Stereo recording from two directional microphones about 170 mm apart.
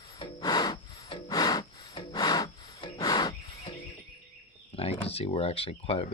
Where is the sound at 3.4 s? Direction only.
35° left (ahead or behind).